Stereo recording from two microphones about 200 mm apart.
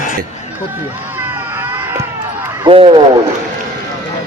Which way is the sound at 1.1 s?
10° right (ahead or behind).